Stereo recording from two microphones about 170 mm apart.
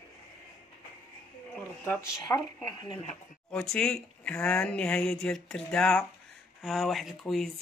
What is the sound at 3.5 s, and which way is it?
Speech, 5° left (ahead or behind).